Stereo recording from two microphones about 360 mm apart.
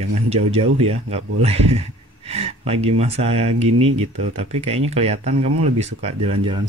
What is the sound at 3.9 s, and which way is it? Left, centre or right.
Speech, centre.